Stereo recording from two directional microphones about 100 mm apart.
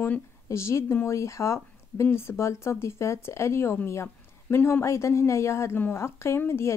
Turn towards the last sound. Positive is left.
turn(degrees=25)  # may be behind; listen again after turning